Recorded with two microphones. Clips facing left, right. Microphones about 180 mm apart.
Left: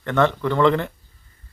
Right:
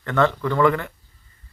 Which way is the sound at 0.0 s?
20° left (ahead or behind).